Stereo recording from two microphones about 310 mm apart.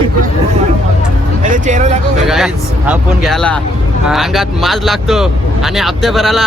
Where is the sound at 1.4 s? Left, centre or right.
Right.